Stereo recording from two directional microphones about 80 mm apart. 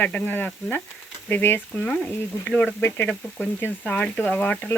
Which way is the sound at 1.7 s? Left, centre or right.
Centre.